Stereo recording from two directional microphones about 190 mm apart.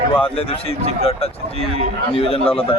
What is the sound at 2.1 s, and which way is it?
Speech, 30° left (ahead or behind).